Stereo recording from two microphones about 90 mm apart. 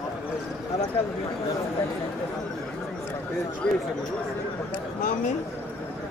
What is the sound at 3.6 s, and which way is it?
Speech, 10° left (ahead or behind).